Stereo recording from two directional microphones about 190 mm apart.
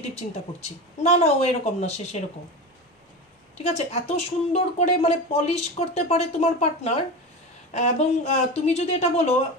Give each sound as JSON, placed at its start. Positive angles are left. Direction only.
{"t": 0.1, "sound": "speech", "side_deg": 35}
{"t": 3.6, "sound": "speech", "side_deg": 35}